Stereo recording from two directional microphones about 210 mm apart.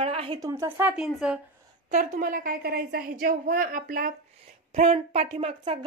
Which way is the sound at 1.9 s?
40° right (ahead or behind).